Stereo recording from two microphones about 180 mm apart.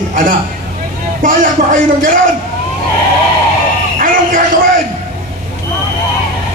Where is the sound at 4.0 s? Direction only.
50° right (ahead or behind).